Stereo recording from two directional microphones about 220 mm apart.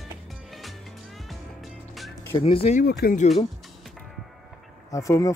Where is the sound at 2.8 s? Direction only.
45° left (ahead or behind).